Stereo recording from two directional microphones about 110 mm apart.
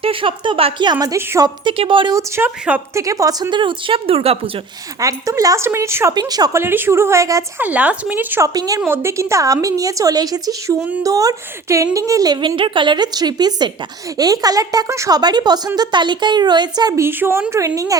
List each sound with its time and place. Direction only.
0.0 s speech: 55° right (ahead or behind)
0.9 s a woman's voice: 30° right (ahead or behind)
1.6 s speech: 55° right (ahead or behind)
2.1 s a woman's voice: 25° right (ahead or behind)
3.5 s speech: 50° right (ahead or behind)
4.9 s speech: 30° right (ahead or behind)
6.1 s a woman's voice: 35° right (ahead or behind)
6.6 s speech: 20° right (ahead or behind)
7.6 s speech: 15° right (ahead or behind)
8.5 s a woman's voice: 35° right (ahead or behind)
8.9 s a woman's voice: 20° right (ahead or behind); by 17.0 s 40° right (ahead or behind)
17.0 s speech: 20° right (ahead or behind)